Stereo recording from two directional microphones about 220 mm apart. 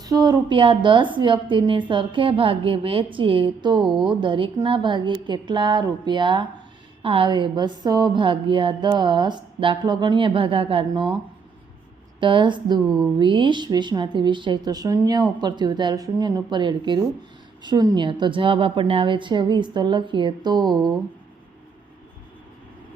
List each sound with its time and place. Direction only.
0.0 s speech: 15° right (ahead or behind)
12.2 s speech: 20° right (ahead or behind)